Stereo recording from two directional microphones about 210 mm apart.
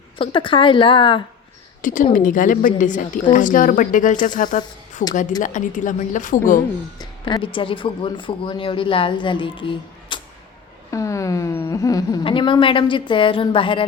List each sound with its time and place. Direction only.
0.2 s speech: 25° left (ahead or behind)
1.8 s speech: 40° left (ahead or behind)
7.0 s speech: 20° left (ahead or behind)